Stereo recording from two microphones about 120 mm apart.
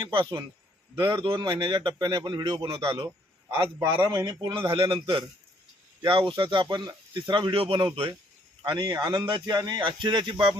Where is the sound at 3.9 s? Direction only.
35° right (ahead or behind).